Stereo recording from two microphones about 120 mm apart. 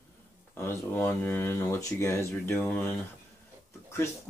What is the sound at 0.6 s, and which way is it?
Speech, 20° left (ahead or behind).